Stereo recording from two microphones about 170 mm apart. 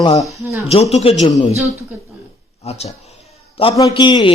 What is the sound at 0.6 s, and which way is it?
Speech, 40° left (ahead or behind).